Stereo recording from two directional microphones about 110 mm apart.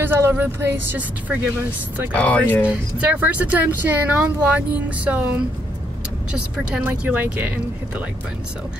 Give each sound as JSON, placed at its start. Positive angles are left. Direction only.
{"t": 0.0, "sound": "speech", "side_deg": -20}
{"t": 2.1, "sound": "speech", "side_deg": 15}
{"t": 2.6, "sound": "speech", "side_deg": -15}
{"t": 6.3, "sound": "speech", "side_deg": -10}